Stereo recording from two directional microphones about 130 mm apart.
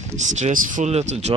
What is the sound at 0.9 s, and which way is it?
Speech, 60° right (ahead or behind).